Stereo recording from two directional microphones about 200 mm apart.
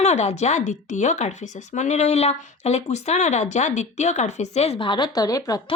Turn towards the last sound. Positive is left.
turn(degrees=20)  # may be behind; listen again after turning